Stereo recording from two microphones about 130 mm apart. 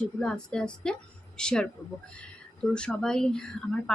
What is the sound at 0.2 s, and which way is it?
A woman's voice, 5° left (ahead or behind).